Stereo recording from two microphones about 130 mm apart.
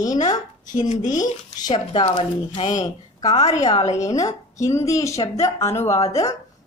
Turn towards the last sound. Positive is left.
turn(degrees=25)  # may be behind; listen again after turning